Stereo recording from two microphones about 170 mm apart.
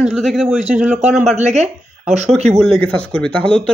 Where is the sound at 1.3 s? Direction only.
45° right (ahead or behind).